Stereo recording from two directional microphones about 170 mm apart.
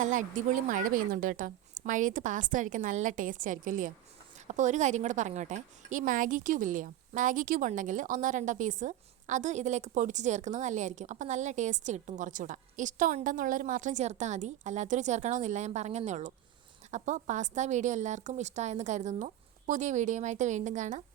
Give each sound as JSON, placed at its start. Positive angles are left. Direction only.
{"t": 0.0, "sound": "a woman's voice", "side_deg": -50}